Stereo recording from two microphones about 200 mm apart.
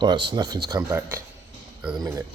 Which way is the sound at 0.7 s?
15° right (ahead or behind).